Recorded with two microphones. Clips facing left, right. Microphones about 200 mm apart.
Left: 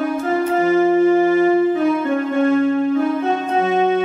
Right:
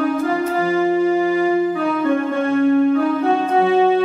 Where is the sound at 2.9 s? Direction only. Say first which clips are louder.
Right 1 dB; 20° left (ahead or behind).